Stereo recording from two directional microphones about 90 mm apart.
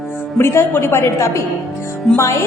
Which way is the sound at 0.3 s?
25° left (ahead or behind).